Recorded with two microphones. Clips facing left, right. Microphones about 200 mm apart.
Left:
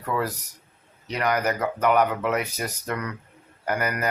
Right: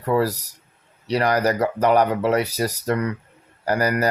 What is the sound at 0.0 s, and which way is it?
Speech, 35° right (ahead or behind).